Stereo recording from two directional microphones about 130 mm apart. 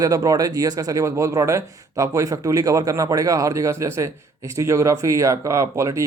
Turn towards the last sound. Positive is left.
turn(degrees=-20)  # may be behind; listen again after turning